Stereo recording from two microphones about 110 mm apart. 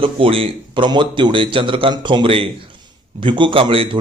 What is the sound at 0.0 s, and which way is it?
Speech, 55° right (ahead or behind).